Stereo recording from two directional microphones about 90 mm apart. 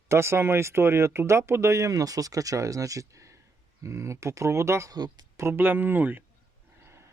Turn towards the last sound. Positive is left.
turn(degrees=-30)  # may be behind; listen again after turning